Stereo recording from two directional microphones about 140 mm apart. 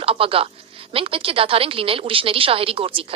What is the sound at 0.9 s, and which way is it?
Speech, 40° right (ahead or behind).